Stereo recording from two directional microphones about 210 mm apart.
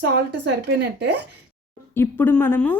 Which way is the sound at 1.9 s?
10° left (ahead or behind).